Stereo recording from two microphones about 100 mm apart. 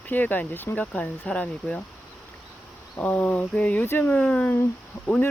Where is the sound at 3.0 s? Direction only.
15° left (ahead or behind).